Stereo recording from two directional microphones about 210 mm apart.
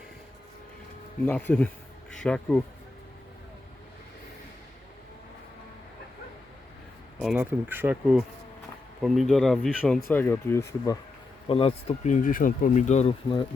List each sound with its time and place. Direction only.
1.2 s speech: 10° left (ahead or behind)
7.2 s speech: 5° right (ahead or behind); by 10.9 s 15° left (ahead or behind)
11.4 s speech: 25° left (ahead or behind)